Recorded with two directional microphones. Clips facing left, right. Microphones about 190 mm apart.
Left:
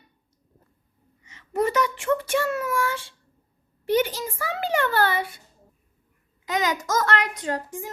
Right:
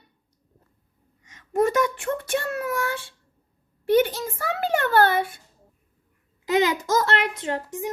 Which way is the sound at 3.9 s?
55° right (ahead or behind).